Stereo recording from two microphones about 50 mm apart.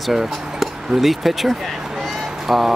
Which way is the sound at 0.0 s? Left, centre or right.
Centre.